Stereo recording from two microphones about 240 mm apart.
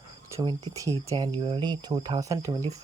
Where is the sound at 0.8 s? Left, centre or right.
Centre.